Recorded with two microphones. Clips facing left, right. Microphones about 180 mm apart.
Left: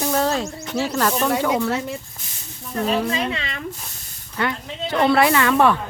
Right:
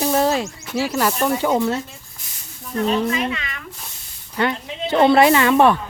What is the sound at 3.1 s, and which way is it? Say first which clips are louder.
Speech: right 1 dB; 30° left (ahead or behind).